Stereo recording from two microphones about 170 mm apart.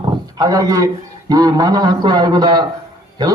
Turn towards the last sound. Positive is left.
turn(degrees=-25)  # may be behind; listen again after turning